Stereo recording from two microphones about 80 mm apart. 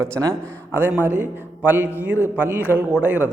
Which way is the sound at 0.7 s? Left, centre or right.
Right.